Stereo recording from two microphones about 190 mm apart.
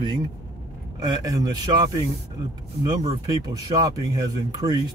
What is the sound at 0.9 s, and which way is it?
Speech, 20° right (ahead or behind).